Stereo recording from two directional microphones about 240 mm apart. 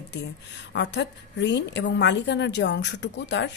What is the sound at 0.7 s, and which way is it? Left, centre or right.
A woman's voice, left.